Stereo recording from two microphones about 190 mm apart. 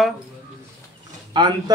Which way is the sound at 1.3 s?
20° right (ahead or behind).